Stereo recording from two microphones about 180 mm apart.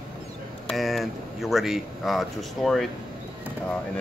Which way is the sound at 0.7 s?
Centre (ahead or behind).